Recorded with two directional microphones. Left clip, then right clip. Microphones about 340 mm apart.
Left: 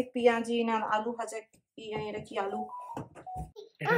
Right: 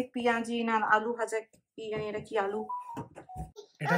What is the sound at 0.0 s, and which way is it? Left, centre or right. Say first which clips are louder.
A woman's voice: left 3 dB; centre.